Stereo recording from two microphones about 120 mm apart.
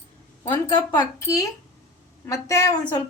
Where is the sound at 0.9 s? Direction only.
25° left (ahead or behind).